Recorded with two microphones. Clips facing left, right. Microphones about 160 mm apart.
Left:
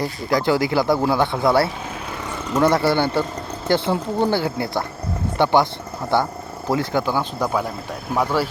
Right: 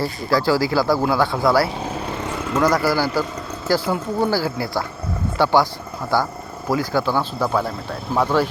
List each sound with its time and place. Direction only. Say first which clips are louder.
0.0 s speech: right 1 dB; 20° left (ahead or behind)
7.0 s speech: right 1 dB; 15° left (ahead or behind)